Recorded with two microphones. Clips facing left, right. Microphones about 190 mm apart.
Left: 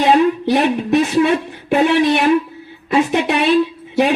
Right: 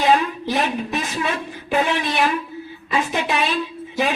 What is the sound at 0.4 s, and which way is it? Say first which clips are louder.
Speech: left 7 dB; 60° left (ahead or behind).